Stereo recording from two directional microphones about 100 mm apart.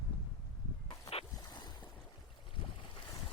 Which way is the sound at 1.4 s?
45° left (ahead or behind).